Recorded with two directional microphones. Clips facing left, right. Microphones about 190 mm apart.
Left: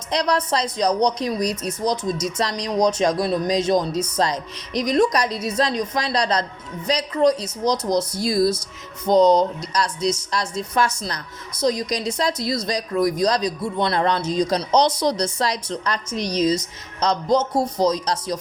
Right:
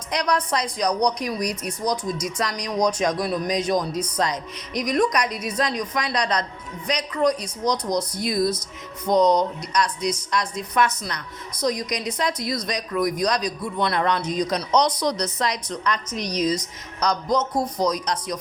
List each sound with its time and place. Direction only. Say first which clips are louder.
0.1 s a woman's voice: left 2 dB; 30° left (ahead or behind)